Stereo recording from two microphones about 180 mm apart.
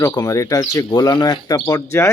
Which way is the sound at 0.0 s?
20° left (ahead or behind).